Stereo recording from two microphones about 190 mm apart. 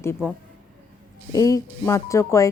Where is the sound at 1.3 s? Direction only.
15° left (ahead or behind).